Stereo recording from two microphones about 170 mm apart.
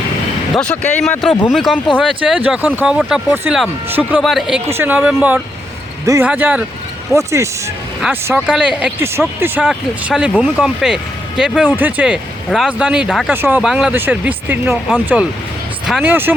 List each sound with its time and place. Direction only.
0.5 s speech: 5° left (ahead or behind); by 4.2 s 10° right (ahead or behind)
4.2 s speech: centre (ahead or behind)
4.6 s speech: 15° right (ahead or behind)
16.0 s speech: 10° right (ahead or behind)